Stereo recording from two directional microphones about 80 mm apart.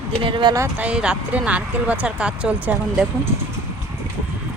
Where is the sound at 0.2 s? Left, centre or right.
Right.